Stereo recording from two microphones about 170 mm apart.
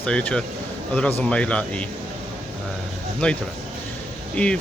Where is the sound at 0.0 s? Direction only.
5° left (ahead or behind).